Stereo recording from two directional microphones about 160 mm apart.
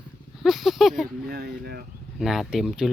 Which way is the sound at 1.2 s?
70° right (ahead or behind).